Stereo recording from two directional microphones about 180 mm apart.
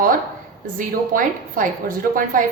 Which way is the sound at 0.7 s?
50° right (ahead or behind).